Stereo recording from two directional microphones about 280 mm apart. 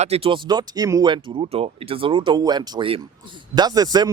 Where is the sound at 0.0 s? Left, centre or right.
Right.